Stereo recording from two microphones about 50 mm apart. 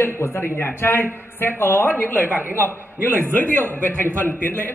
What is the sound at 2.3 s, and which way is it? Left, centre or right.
A man's voice, right.